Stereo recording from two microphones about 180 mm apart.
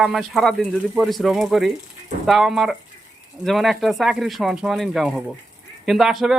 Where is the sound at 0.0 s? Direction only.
Centre (ahead or behind).